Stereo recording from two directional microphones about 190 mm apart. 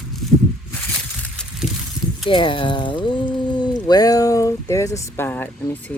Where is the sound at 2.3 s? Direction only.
25° left (ahead or behind).